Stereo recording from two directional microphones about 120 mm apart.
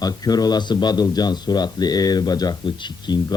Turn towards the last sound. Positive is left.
turn(degrees=35)  # may be behind; listen again after turning